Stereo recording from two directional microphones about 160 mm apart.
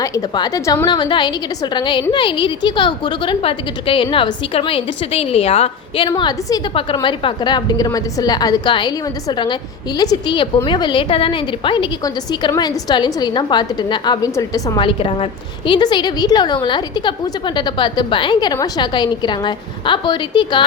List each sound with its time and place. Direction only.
0.0 s a woman's voice: 25° left (ahead or behind); by 6.1 s 40° left (ahead or behind)
6.1 s a woman's voice: 25° left (ahead or behind)
10.0 s a woman's voice: 25° left (ahead or behind)
14.8 s a woman's voice: 35° left (ahead or behind)